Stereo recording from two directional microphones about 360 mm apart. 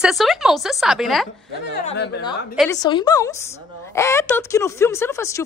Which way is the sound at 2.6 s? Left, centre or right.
Centre.